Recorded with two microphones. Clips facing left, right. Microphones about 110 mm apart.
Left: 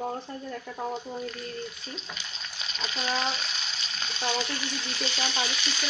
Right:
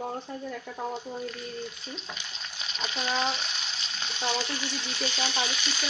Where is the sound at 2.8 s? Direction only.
15° right (ahead or behind).